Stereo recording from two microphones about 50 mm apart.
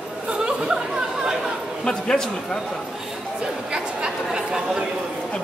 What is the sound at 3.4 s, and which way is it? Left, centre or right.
Speech, centre.